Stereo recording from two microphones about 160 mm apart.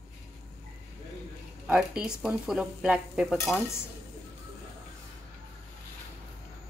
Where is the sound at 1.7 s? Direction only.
5° right (ahead or behind).